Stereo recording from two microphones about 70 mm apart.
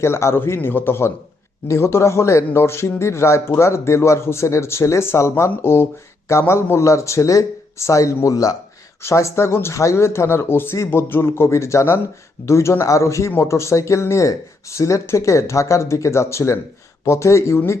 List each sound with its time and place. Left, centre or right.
0.0 s speech: left
9.0 s speech: left